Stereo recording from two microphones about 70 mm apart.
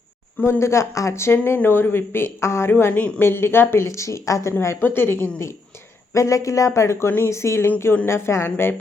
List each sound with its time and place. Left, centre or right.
0.6 s speech: left
3.8 s speech: left
4.8 s speech: left
6.1 s speech: left